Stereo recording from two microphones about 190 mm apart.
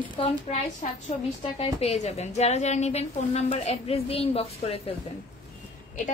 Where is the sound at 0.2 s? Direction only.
30° left (ahead or behind).